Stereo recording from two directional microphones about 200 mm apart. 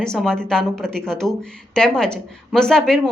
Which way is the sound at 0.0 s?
5° left (ahead or behind).